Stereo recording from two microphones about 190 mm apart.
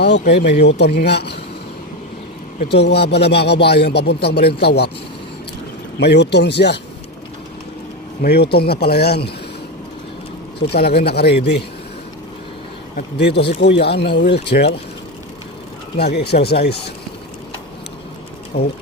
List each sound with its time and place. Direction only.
0.0 s speech: 60° left (ahead or behind)
2.6 s speech: 60° left (ahead or behind)
6.0 s speech: 65° left (ahead or behind)
8.2 s speech: 55° left (ahead or behind)
10.7 s speech: 55° left (ahead or behind)
13.0 s speech: 60° left (ahead or behind)
16.0 s speech: 60° left (ahead or behind)
18.5 s speech: 60° left (ahead or behind)